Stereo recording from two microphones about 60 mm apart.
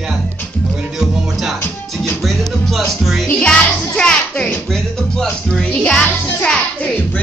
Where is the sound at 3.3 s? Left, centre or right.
Centre.